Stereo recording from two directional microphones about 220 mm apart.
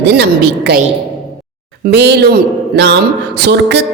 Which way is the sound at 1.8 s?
50° right (ahead or behind).